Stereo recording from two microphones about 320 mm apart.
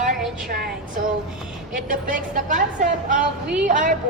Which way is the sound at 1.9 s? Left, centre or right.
Right.